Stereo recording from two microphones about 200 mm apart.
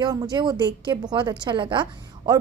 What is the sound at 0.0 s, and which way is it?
A woman's voice, 20° right (ahead or behind).